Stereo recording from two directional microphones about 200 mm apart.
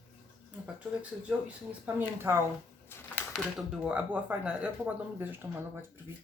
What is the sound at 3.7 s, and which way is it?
Speech, 5° right (ahead or behind).